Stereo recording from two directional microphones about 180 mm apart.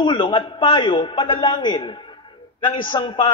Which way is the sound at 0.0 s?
25° left (ahead or behind).